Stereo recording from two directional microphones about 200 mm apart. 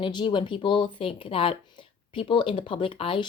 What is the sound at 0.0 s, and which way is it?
A woman's voice, 25° left (ahead or behind).